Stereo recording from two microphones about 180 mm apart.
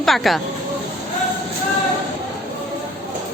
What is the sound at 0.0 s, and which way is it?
Speech, centre (ahead or behind).